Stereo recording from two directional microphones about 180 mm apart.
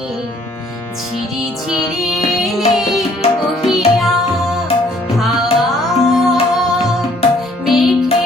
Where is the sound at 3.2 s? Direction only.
35° left (ahead or behind).